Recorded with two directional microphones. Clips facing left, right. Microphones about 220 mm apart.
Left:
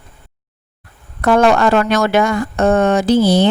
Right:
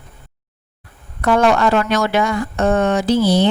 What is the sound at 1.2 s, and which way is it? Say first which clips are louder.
Speech: left 3 dB; 50° left (ahead or behind).